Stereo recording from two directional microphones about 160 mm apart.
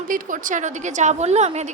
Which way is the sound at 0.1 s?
55° right (ahead or behind).